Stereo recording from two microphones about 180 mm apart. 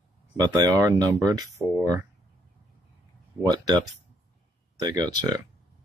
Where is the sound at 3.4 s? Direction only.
20° right (ahead or behind).